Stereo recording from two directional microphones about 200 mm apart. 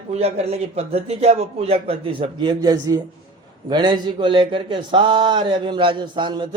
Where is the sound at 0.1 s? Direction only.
30° right (ahead or behind).